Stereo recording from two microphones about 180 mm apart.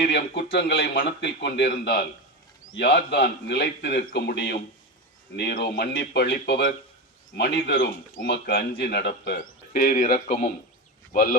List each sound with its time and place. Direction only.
0.0 s a man's voice: 65° left (ahead or behind)
9.4 s speech: 50° left (ahead or behind)